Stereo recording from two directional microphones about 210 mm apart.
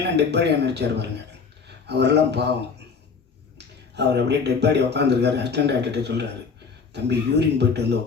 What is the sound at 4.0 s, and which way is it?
Speech, 55° right (ahead or behind).